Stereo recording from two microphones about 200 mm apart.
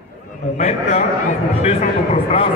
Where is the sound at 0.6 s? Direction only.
30° left (ahead or behind).